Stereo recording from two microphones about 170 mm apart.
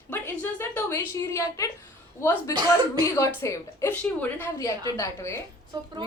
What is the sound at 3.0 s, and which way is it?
A woman's voice, 15° left (ahead or behind).